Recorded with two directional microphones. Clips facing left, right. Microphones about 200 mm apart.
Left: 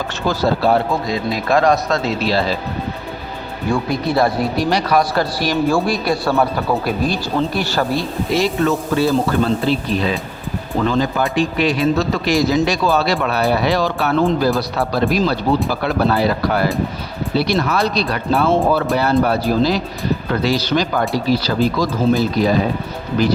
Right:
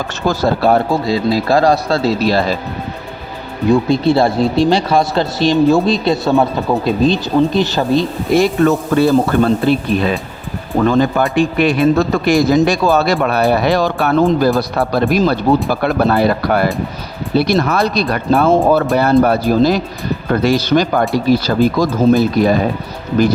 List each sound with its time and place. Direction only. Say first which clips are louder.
0.3 s a man's voice: right 3 dB; 50° right (ahead or behind)
1.0 s speech: right 5 dB; 30° right (ahead or behind)
3.7 s speech: right 7 dB; 25° right (ahead or behind)
8.3 s a man's voice: right 5 dB; 50° right (ahead or behind)